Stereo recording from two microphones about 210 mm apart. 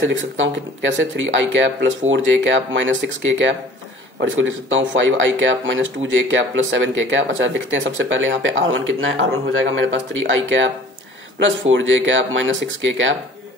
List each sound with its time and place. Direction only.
0.4 s speech: 65° right (ahead or behind)
11.7 s speech: 65° right (ahead or behind)